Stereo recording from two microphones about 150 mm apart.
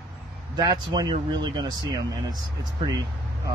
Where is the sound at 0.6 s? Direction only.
25° right (ahead or behind).